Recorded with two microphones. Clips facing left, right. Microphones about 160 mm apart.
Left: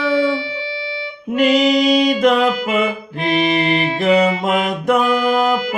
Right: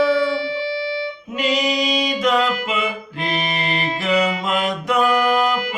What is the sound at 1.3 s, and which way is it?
Music, 60° left (ahead or behind).